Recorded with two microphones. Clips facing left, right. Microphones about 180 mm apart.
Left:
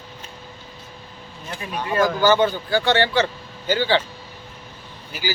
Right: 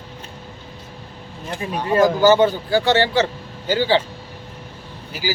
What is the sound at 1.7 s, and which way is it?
Speech, 35° right (ahead or behind).